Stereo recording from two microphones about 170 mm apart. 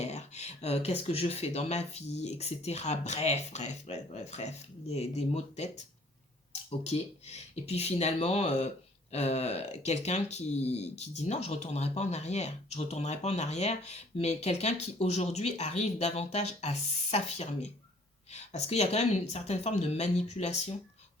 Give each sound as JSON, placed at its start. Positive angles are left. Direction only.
{"t": 0.0, "sound": "speech", "side_deg": 40}